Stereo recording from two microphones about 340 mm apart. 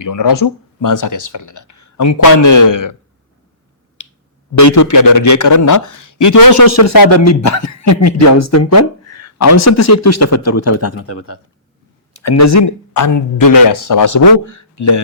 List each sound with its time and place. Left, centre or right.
0.0 s speech: left
4.5 s speech: left